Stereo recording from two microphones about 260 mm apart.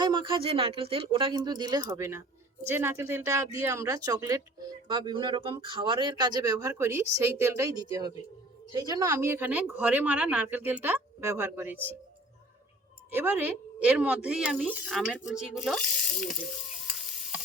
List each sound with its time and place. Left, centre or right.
0.0 s speech: centre
13.1 s a woman's voice: centre